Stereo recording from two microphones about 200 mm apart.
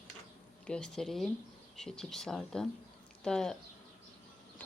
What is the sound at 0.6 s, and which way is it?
Speech, 5° left (ahead or behind).